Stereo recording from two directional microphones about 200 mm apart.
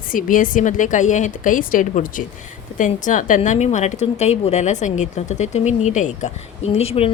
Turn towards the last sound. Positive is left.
turn(degrees=30)  # may be behind; listen again after turning